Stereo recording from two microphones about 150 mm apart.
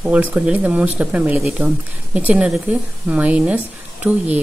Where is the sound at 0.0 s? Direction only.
10° right (ahead or behind).